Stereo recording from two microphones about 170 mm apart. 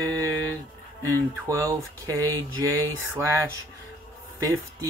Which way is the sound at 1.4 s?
20° right (ahead or behind).